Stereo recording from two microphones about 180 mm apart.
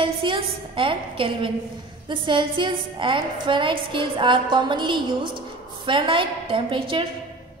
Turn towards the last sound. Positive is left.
turn(degrees=-30)  # may be behind; listen again after turning